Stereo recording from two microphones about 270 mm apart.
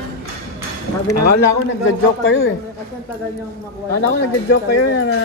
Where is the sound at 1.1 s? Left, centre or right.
Left.